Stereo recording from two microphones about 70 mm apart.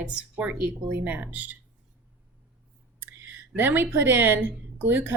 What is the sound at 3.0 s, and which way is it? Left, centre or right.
A woman's voice, right.